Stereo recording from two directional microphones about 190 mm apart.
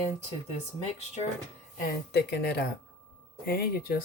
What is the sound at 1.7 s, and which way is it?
Speech, 60° left (ahead or behind).